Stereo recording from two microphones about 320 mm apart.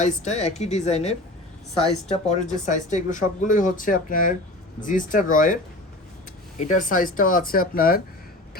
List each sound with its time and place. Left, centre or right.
0.0 s speech: left
6.6 s speech: left